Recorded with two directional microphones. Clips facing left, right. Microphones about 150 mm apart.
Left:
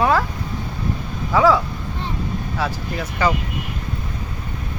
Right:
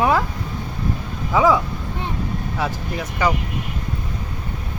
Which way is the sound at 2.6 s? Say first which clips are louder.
Even; 15° right (ahead or behind).